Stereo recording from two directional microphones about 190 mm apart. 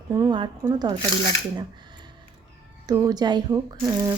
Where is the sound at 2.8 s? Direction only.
20° right (ahead or behind).